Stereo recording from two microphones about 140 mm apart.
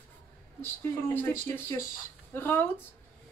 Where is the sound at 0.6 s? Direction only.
15° left (ahead or behind).